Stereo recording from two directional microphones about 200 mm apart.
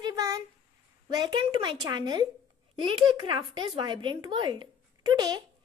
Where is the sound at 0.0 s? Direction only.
15° right (ahead or behind).